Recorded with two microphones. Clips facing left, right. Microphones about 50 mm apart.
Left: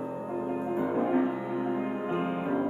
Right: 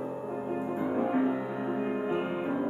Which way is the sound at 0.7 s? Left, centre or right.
Centre.